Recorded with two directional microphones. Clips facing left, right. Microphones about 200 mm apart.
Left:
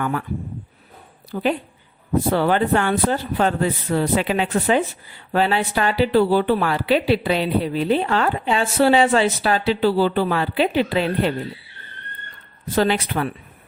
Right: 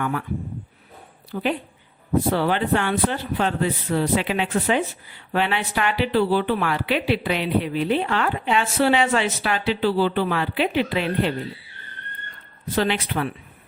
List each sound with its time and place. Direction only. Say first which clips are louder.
1.3 s speech: left 3 dB; 40° left (ahead or behind)
12.7 s speech: left 3 dB; 40° left (ahead or behind)